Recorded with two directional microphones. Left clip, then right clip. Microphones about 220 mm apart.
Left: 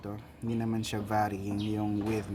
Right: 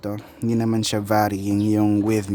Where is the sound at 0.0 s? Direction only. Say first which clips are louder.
Right 12 dB; 50° right (ahead or behind).